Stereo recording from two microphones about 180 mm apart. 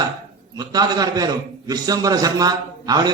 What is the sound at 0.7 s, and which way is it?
A man's voice, 20° right (ahead or behind).